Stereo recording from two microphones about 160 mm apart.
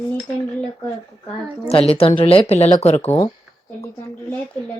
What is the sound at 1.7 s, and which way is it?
Speech, 40° left (ahead or behind).